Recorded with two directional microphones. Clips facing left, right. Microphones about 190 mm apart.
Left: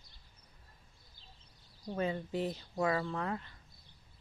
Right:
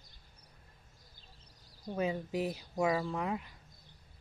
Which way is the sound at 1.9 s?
10° right (ahead or behind).